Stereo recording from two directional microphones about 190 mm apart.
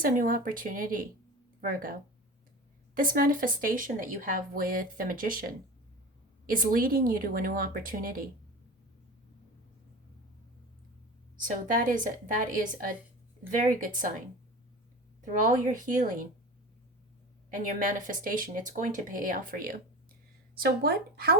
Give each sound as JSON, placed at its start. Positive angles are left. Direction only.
{"t": 0.0, "sound": "speech", "side_deg": -45}
{"t": 11.3, "sound": "speech", "side_deg": -45}
{"t": 15.2, "sound": "speech", "side_deg": -40}
{"t": 17.7, "sound": "speech", "side_deg": -45}